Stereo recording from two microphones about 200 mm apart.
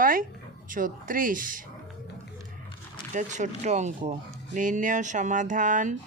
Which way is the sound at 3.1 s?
35° right (ahead or behind).